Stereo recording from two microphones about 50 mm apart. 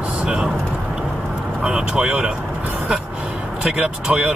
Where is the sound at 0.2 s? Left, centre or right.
Centre.